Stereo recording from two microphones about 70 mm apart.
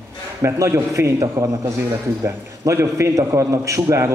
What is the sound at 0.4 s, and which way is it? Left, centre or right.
A man's voice, right.